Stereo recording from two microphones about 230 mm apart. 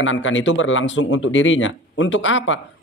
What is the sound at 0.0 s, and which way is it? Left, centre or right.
Speech, left.